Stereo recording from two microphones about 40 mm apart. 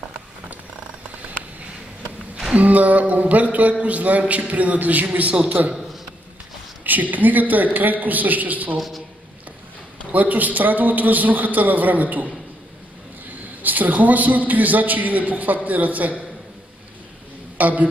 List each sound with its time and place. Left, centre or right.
2.5 s a sound: right
5.3 s a man's voice: right
6.8 s a man's voice: right
8.7 s a man's voice: centre
10.1 s a man's voice: right
13.6 s a man's voice: right
17.6 s a man's voice: right